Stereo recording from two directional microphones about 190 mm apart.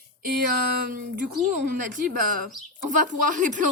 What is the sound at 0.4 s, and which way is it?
Speech, 45° right (ahead or behind).